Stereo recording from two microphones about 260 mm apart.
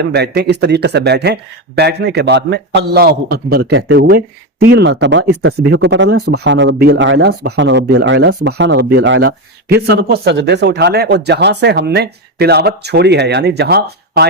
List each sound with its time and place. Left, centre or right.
0.0 s speech: right